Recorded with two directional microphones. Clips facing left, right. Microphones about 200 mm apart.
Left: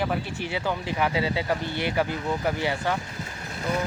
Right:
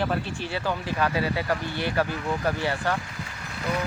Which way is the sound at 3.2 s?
35° left (ahead or behind).